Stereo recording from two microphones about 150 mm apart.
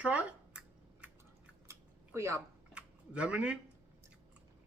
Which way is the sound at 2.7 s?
5° right (ahead or behind).